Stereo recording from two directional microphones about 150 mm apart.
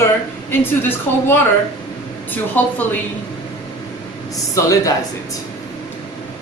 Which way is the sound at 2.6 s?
10° left (ahead or behind).